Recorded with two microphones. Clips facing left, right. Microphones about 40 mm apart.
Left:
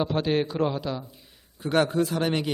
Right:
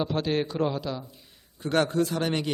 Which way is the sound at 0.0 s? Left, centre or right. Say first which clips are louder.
Left 2 dB; centre.